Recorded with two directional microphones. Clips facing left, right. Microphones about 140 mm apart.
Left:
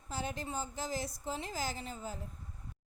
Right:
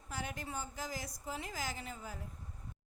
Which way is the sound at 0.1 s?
30° left (ahead or behind).